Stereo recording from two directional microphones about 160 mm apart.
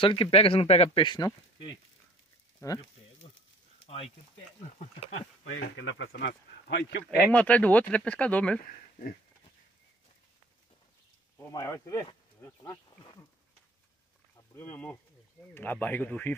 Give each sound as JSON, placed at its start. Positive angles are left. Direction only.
{"t": 0.0, "sound": "speech", "side_deg": 35}
{"t": 2.6, "sound": "sizzle", "side_deg": 20}
{"t": 3.8, "sound": "a sound", "side_deg": 35}
{"t": 6.1, "sound": "speech", "side_deg": 90}
{"t": 7.2, "sound": "speech", "side_deg": 10}
{"t": 11.3, "sound": "speech", "side_deg": 20}
{"t": 14.3, "sound": "a sound", "side_deg": 15}
{"t": 15.5, "sound": "speech", "side_deg": 10}